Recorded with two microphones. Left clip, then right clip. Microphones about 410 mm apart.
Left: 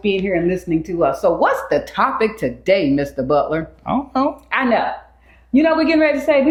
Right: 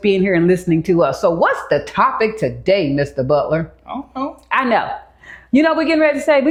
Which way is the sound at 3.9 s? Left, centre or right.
Left.